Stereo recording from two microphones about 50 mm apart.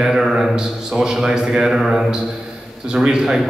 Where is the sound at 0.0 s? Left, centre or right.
Centre.